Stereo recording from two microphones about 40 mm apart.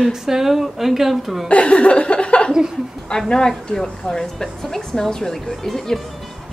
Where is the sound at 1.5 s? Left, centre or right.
Left.